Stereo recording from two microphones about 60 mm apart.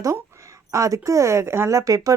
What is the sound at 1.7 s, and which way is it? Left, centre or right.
Speech, right.